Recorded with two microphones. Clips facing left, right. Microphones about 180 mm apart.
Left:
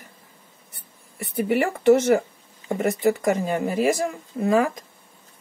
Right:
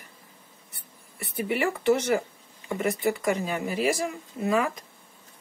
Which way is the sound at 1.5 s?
50° left (ahead or behind).